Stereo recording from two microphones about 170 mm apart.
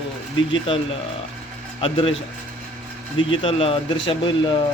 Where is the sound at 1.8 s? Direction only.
30° left (ahead or behind).